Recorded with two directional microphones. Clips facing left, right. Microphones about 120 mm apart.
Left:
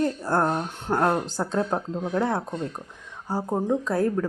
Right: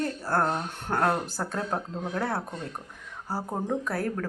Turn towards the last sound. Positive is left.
turn(degrees=20)  # may be behind; listen again after turning